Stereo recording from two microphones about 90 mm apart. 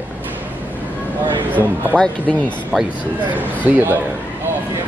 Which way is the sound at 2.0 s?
15° left (ahead or behind).